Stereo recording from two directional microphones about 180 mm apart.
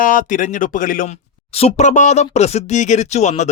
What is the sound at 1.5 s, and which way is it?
A man's voice, 35° left (ahead or behind).